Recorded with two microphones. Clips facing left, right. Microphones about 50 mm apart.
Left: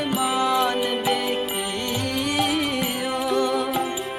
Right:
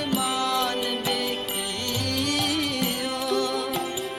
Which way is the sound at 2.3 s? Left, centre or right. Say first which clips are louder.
Left 3 dB; centre.